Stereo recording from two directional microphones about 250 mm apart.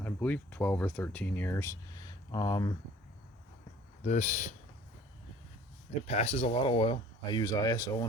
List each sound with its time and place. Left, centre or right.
0.0 s speech: centre
4.0 s speech: left
6.1 s speech: left